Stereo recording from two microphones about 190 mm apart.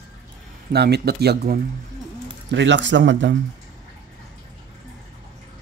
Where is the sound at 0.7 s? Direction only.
60° right (ahead or behind).